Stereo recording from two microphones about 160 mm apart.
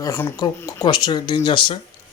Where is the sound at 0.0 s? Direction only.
20° left (ahead or behind).